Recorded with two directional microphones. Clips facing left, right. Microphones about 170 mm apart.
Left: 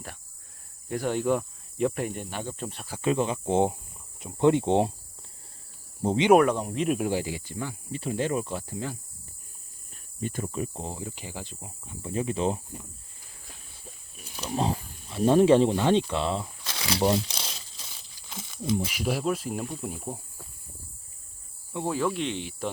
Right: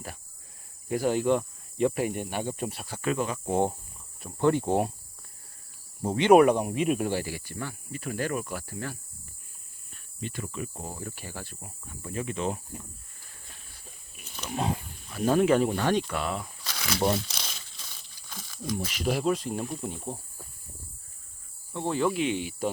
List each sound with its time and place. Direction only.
0.9 s speech: 5° right (ahead or behind)
3.0 s speech: 25° left (ahead or behind)
6.0 s speech: 25° left (ahead or behind)
6.3 s speech: 10° right (ahead or behind)
7.1 s speech: 20° left (ahead or behind)
10.2 s speech: 45° left (ahead or behind); by 12.6 s 30° left (ahead or behind)
14.4 s wild animals: 30° left (ahead or behind)
15.1 s speech: 25° left (ahead or behind)
17.3 s crumpling: 30° left (ahead or behind)
18.3 s a sound: 20° left (ahead or behind)
18.8 s speech: 10° left (ahead or behind)
21.7 s speech: 10° left (ahead or behind)
21.9 s speech: centre (ahead or behind)